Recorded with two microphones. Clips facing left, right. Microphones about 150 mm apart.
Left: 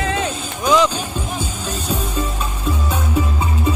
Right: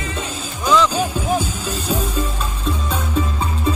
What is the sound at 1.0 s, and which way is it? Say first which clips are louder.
Music: right 6 dB; 40° right (ahead or behind).